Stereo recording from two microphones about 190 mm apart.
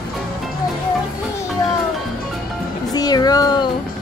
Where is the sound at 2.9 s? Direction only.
20° left (ahead or behind).